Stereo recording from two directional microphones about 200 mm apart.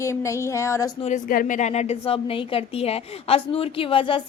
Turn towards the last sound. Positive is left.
turn(degrees=25)  # may be behind; listen again after turning